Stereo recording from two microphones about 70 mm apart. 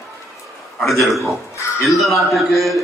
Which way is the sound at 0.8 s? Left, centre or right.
Centre.